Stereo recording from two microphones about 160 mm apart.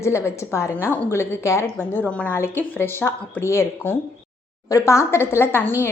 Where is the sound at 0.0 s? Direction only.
15° left (ahead or behind).